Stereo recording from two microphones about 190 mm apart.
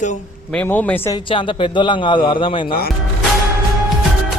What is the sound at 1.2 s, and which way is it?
A man's voice, 25° left (ahead or behind).